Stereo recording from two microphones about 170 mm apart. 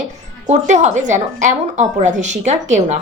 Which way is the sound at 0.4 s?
40° right (ahead or behind).